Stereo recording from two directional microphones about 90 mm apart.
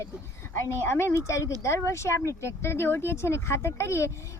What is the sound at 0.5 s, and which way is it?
A child's voice, 30° left (ahead or behind).